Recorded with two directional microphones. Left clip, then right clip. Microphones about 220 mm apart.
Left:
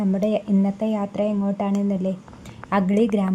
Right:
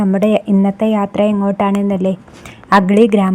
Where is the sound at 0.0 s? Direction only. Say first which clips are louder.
Right 9 dB; 20° right (ahead or behind).